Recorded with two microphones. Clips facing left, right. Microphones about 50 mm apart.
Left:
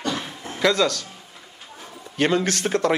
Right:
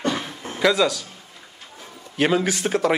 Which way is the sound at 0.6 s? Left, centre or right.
Centre.